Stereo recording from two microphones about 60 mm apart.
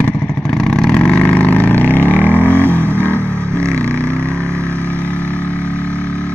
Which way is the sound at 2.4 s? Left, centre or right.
Right.